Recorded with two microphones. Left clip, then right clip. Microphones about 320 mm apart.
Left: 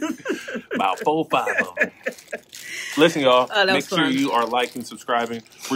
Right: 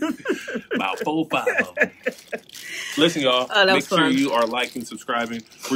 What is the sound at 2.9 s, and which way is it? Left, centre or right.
Speech, centre.